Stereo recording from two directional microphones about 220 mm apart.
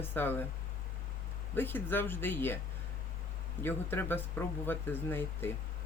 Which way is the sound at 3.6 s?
10° left (ahead or behind).